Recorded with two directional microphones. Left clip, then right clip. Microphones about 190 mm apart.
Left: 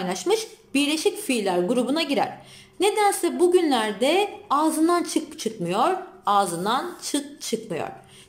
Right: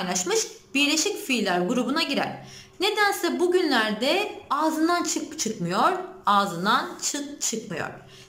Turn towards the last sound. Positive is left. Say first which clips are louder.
# left 2 dB
turn(degrees=20)  # may be behind; listen again after turning